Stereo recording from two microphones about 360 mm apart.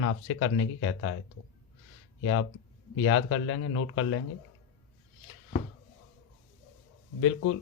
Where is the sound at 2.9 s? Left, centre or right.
Left.